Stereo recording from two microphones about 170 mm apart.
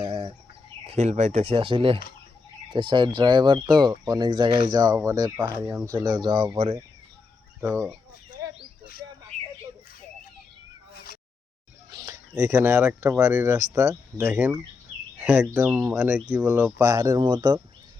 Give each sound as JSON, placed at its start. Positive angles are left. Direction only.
{"t": 0.0, "sound": "chicken", "side_deg": -30}
{"t": 0.9, "sound": "speech", "side_deg": -40}
{"t": 7.6, "sound": "speech", "side_deg": -20}
{"t": 10.9, "sound": "a sound", "side_deg": 65}
{"t": 11.9, "sound": "a sound", "side_deg": -25}
{"t": 12.3, "sound": "speech", "side_deg": -10}